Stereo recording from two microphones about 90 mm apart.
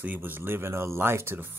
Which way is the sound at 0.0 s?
20° right (ahead or behind).